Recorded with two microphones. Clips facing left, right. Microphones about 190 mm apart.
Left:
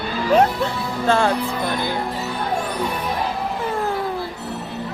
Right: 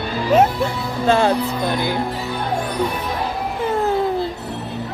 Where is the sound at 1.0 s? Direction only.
20° right (ahead or behind).